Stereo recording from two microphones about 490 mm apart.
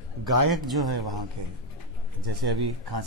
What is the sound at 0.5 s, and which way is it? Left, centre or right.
Speech, centre.